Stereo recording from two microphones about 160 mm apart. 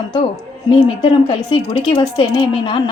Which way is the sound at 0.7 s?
30° left (ahead or behind).